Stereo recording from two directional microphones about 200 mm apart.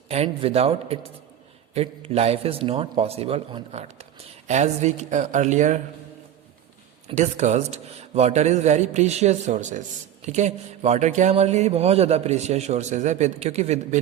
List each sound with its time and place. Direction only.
0.1 s a man's voice: 30° right (ahead or behind)
7.1 s a man's voice: 35° right (ahead or behind)